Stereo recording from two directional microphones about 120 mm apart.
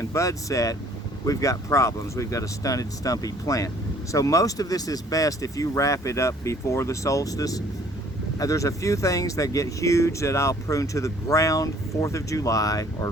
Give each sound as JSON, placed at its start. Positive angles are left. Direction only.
{"t": 0.0, "sound": "speech", "side_deg": 25}